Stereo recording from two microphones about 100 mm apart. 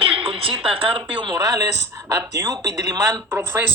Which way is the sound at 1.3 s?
35° right (ahead or behind).